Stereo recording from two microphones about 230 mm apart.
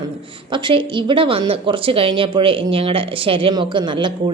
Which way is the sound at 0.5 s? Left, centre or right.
Right.